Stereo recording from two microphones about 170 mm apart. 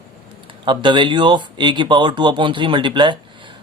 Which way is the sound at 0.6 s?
30° right (ahead or behind).